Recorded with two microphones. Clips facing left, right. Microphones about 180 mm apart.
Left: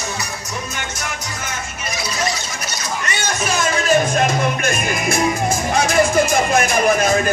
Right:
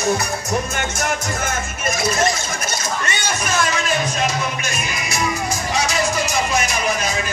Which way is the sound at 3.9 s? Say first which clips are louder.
Left 5 dB; 50° left (ahead or behind).